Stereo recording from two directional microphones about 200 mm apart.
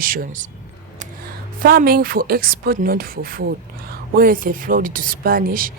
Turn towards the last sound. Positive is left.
turn(degrees=-45)  # may be behind; listen again after turning